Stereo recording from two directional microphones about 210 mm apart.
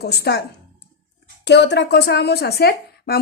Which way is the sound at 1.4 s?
55° left (ahead or behind).